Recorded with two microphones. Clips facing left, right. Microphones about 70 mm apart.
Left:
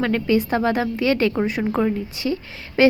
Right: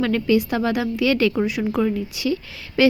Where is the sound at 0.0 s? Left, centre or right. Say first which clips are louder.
Right 1 dB; left.